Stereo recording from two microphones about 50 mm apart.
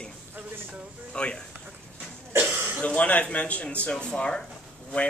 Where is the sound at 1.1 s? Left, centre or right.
Centre.